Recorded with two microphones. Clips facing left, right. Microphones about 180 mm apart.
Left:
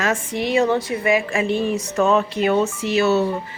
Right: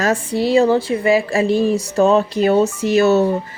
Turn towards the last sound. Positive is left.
turn(degrees=-45)  # may be behind; listen again after turning